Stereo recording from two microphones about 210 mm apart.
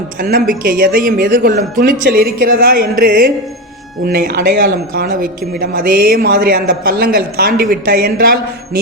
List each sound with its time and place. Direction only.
0.2 s speech: 40° right (ahead or behind)